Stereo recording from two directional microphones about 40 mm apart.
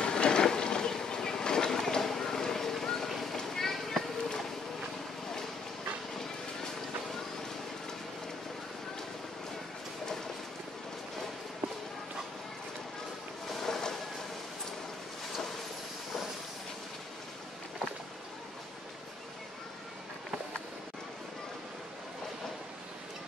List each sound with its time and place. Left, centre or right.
0.0 s train: centre
3.1 s run: centre
13.5 s boat: centre